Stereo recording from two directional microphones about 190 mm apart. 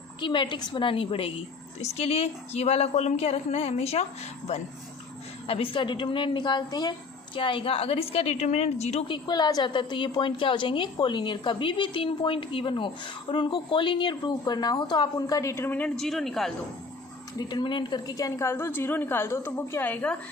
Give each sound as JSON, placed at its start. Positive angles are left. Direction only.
{"t": 0.2, "sound": "a woman's voice", "side_deg": 25}
{"t": 5.5, "sound": "a woman's voice", "side_deg": 30}
{"t": 17.3, "sound": "a woman's voice", "side_deg": 25}